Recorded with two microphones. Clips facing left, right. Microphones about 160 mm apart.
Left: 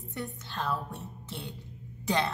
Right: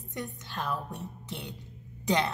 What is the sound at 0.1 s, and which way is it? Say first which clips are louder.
Music: even; 15° right (ahead or behind).